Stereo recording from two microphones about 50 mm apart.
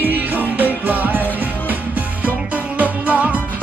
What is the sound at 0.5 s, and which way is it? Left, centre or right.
Music, right.